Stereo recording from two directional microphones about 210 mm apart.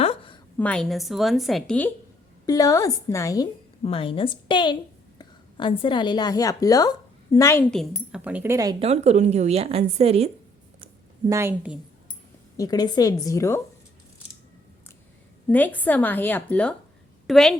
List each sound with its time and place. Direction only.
0.0 s a sound: 25° left (ahead or behind)
0.5 s a woman's voice: 5° left (ahead or behind)
2.5 s a woman's voice: 15° left (ahead or behind); by 8.7 s 15° right (ahead or behind)
8.8 s a woman's voice: 30° right (ahead or behind)
11.3 s a woman's voice: 10° right (ahead or behind)
12.5 s a woman's voice: 15° left (ahead or behind)
15.4 s a woman's voice: 10° left (ahead or behind)